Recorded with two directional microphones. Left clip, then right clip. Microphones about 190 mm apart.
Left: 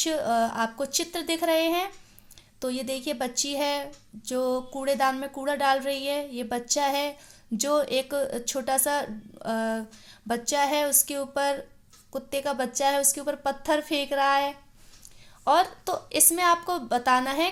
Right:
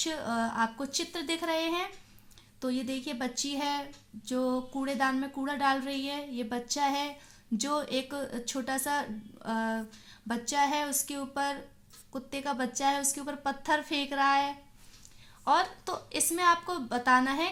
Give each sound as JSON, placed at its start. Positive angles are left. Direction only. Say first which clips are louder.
{"t": 0.0, "sound": "a woman's voice", "louder": "left 8 dB", "side_deg": 55}